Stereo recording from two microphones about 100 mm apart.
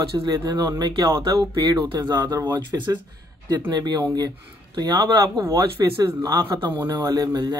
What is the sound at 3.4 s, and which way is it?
Speech, 45° right (ahead or behind).